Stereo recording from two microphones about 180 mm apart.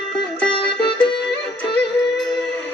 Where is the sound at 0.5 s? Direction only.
30° left (ahead or behind).